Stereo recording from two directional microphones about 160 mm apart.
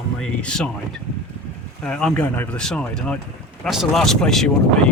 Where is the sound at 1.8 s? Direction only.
5° left (ahead or behind).